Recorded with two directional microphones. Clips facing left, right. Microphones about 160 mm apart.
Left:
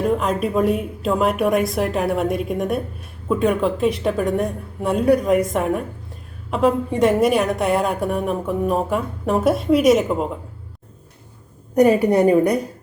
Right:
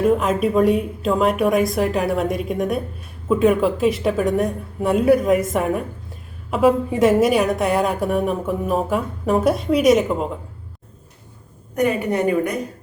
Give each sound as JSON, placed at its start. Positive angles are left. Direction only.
{"t": 0.0, "sound": "a woman's voice", "side_deg": 0}
{"t": 11.7, "sound": "a woman's voice", "side_deg": 35}